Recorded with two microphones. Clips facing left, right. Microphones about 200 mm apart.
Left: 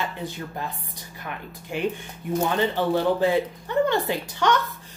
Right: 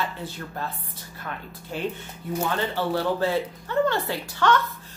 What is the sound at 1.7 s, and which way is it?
Speech, 15° left (ahead or behind).